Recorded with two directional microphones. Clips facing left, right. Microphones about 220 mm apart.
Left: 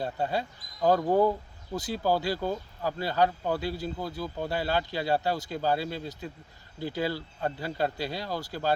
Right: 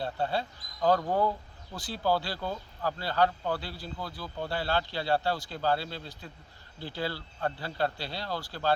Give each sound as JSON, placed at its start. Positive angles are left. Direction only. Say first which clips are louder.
{"t": 0.0, "sound": "speech", "louder": "left 1 dB", "side_deg": 15}